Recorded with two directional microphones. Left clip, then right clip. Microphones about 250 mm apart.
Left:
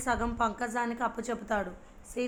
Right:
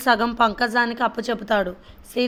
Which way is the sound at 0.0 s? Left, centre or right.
Right.